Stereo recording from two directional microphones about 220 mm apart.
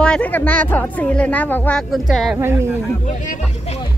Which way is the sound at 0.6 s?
5° left (ahead or behind).